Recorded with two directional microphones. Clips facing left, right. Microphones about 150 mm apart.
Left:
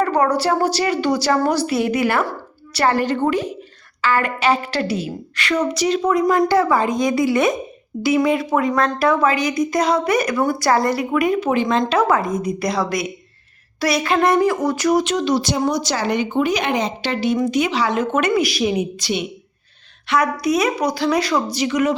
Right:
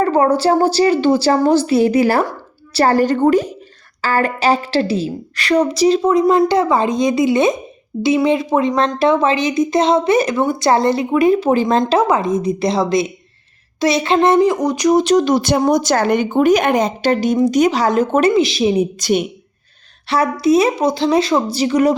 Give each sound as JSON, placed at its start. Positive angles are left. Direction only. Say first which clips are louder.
{"t": 0.0, "sound": "a woman's voice", "louder": "right 4 dB", "side_deg": -25}
{"t": 11.9, "sound": "a woman's voice", "louder": "right 3 dB", "side_deg": -20}
{"t": 15.0, "sound": "speech", "louder": "right 6 dB", "side_deg": -45}
{"t": 18.9, "sound": "speech", "louder": "right 7 dB", "side_deg": -45}
{"t": 20.1, "sound": "a woman's voice", "louder": "right 4 dB", "side_deg": -30}